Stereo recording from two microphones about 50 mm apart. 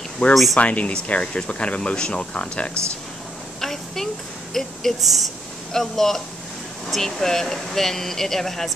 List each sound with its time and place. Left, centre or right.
0.3 s speech: centre
0.6 s speech: left
3.6 s a sound: centre
4.6 s speech: centre